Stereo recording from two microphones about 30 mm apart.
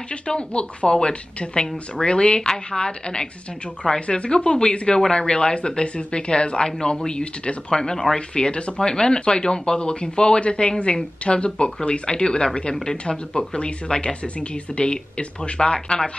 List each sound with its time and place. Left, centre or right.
0.3 s speech: left
2.5 s speech: left
8.4 s speech: left
10.4 s speech: left
13.5 s speech: left